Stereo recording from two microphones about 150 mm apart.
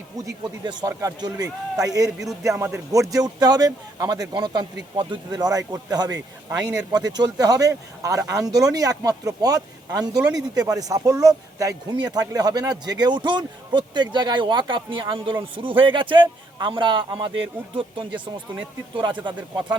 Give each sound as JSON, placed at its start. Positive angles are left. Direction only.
{"t": 0.4, "sound": "a man's voice", "side_deg": -30}